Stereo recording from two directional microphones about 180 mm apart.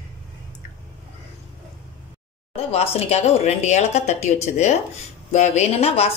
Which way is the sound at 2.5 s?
35° left (ahead or behind).